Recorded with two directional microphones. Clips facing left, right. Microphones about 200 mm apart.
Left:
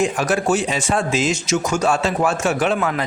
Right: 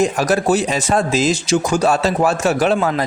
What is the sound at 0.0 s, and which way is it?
Speech, 40° right (ahead or behind).